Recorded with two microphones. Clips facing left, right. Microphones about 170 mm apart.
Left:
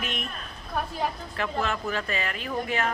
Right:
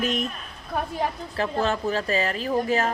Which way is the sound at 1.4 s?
35° right (ahead or behind).